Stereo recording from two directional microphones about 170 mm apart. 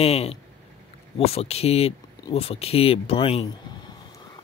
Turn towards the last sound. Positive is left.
turn(degrees=35)  # may be behind; listen again after turning